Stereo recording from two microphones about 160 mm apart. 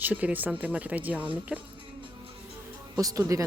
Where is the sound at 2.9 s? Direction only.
20° right (ahead or behind).